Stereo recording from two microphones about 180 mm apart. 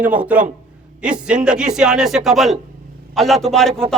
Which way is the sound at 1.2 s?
5° right (ahead or behind).